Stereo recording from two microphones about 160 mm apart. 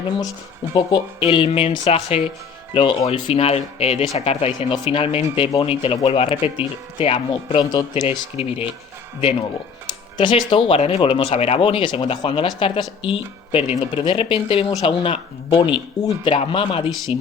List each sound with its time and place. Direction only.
0.7 s speech: 25° left (ahead or behind)
2.7 s speech: 30° left (ahead or behind)
7.6 s speech: 25° left (ahead or behind)
8.4 s speech: 35° left (ahead or behind)
10.2 s speech: 30° left (ahead or behind)